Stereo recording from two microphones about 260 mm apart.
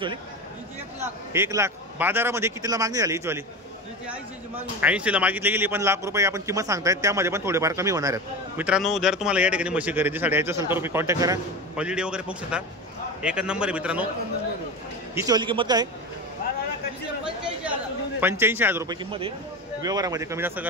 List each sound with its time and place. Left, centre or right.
1.3 s a man's voice: centre
4.7 s a man's voice: centre
15.1 s a man's voice: centre
18.2 s a man's voice: centre